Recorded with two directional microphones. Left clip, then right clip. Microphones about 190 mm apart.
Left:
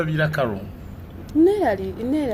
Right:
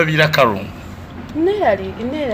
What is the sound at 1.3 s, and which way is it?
A woman's voice, 50° left (ahead or behind).